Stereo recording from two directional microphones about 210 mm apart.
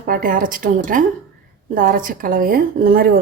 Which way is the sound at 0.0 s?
40° right (ahead or behind).